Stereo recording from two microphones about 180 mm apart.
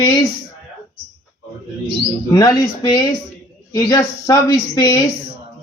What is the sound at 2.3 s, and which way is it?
Speech, 20° left (ahead or behind).